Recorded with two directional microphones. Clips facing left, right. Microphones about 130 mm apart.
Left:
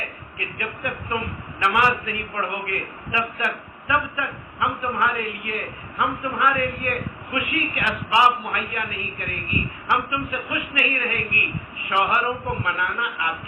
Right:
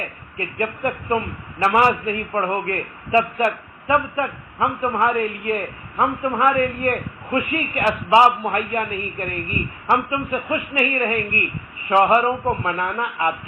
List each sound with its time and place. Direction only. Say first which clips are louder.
0.3 s a man's voice: right 7 dB; 40° right (ahead or behind)